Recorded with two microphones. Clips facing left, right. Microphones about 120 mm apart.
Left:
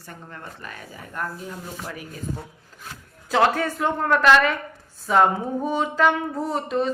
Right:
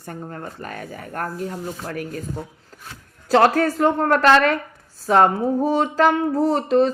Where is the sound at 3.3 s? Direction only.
45° right (ahead or behind).